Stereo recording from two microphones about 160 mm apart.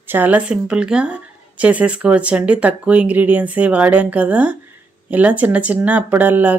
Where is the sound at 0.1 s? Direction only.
10° right (ahead or behind).